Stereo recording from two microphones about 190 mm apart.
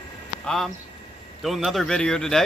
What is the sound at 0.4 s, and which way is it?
Speech, centre (ahead or behind).